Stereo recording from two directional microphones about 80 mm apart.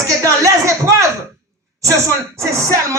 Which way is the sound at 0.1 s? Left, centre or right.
Right.